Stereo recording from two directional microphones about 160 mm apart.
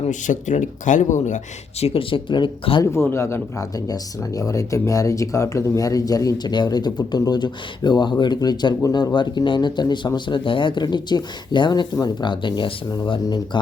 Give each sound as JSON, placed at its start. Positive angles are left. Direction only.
{"t": 0.1, "sound": "speech", "side_deg": 50}
{"t": 1.8, "sound": "speech", "side_deg": 35}
{"t": 2.8, "sound": "speech", "side_deg": 15}